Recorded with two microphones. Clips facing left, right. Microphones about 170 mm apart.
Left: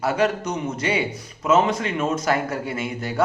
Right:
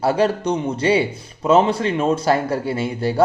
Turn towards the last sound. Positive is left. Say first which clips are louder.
# right 6 dB
turn(degrees=-30)  # may be behind; listen again after turning